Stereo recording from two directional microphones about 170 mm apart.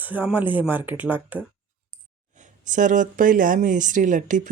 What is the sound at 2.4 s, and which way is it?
Speech, 50° right (ahead or behind).